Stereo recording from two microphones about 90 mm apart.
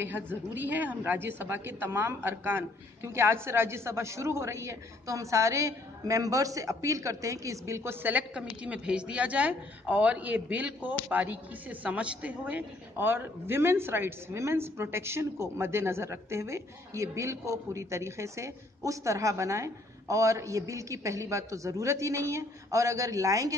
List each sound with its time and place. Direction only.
0.0 s a woman's voice: 20° right (ahead or behind); by 23.5 s 40° right (ahead or behind)